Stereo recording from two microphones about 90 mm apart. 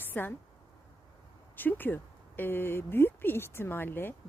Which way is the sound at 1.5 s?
20° left (ahead or behind).